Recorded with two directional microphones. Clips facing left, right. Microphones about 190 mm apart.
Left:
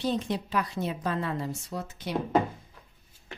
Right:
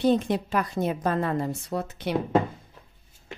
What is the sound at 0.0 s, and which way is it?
A woman's voice, 55° right (ahead or behind).